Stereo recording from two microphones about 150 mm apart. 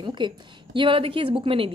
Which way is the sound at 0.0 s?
30° right (ahead or behind).